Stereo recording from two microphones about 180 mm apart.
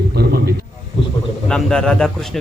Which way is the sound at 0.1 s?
60° right (ahead or behind).